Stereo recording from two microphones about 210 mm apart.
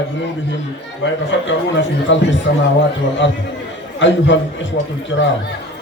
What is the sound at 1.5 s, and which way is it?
Speech, 60° left (ahead or behind).